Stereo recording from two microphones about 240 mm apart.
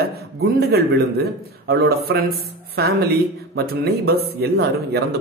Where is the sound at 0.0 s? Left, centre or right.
Right.